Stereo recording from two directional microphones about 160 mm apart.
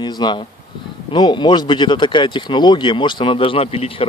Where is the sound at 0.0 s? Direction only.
25° left (ahead or behind).